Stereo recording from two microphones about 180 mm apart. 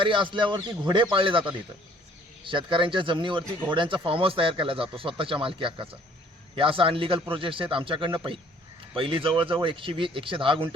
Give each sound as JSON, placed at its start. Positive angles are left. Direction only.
{"t": 0.0, "sound": "speech", "side_deg": -25}